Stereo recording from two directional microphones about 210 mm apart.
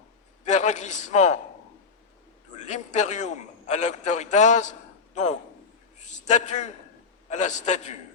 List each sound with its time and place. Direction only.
0.4 s a man's voice: 35° left (ahead or behind)
2.6 s a man's voice: 35° left (ahead or behind)